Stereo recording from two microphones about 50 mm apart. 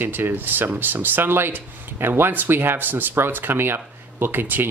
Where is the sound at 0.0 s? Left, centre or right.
Right.